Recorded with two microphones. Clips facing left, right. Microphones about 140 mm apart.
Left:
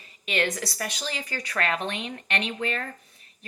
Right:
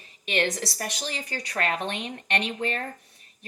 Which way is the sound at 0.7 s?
35° right (ahead or behind).